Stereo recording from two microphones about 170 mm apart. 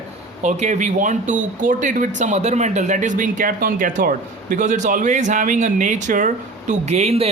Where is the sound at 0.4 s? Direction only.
45° right (ahead or behind).